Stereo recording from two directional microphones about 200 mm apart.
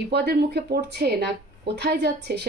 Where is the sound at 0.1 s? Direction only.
55° right (ahead or behind).